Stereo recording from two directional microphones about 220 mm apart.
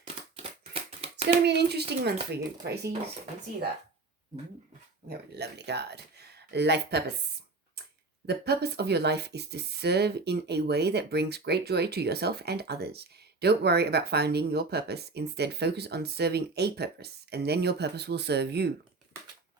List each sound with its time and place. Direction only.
0.0 s a sound: 25° right (ahead or behind)
1.1 s speech: 50° right (ahead or behind)
5.0 s speech: 50° right (ahead or behind)
8.3 s speech: 45° right (ahead or behind)